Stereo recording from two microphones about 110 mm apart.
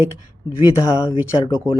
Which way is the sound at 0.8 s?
25° left (ahead or behind).